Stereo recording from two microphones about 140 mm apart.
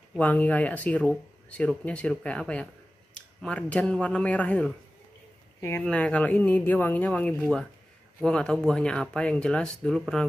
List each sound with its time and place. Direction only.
0.2 s speech: 10° left (ahead or behind)